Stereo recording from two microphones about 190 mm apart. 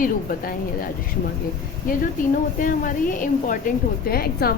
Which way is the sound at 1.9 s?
45° left (ahead or behind).